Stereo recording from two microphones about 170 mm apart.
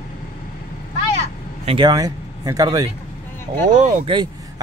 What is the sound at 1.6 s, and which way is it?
Speech, 25° right (ahead or behind).